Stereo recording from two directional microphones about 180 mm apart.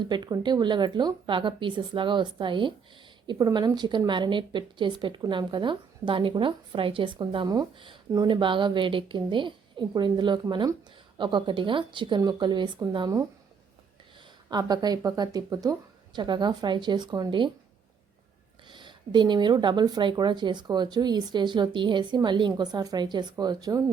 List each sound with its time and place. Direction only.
0.0 s a woman's voice: 25° right (ahead or behind)
14.5 s a woman's voice: 20° right (ahead or behind)
18.7 s a woman's voice: 25° right (ahead or behind)